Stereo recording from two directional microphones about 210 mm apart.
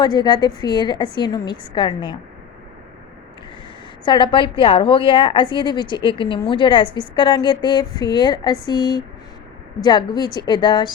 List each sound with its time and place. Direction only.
0.0 s a woman's voice: 20° left (ahead or behind)
4.0 s a woman's voice: 20° left (ahead or behind)